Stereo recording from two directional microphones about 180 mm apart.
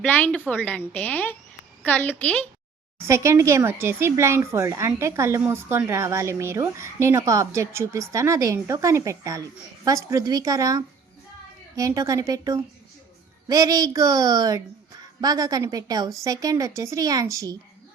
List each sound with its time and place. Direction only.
0.0 s a woman's voice: 10° left (ahead or behind)
3.1 s a woman's voice: 15° right (ahead or behind)